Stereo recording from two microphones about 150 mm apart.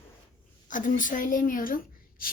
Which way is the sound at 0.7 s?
60° left (ahead or behind).